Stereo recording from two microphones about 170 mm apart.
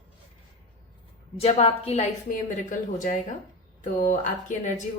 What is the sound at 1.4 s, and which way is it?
Speech, 35° left (ahead or behind).